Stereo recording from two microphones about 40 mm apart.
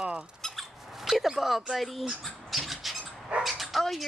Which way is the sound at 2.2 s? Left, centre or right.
Centre.